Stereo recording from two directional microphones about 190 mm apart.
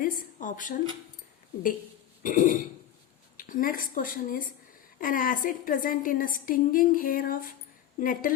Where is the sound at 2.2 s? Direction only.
45° left (ahead or behind).